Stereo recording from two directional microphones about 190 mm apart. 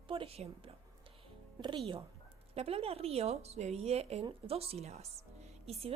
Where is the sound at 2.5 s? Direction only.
30° right (ahead or behind).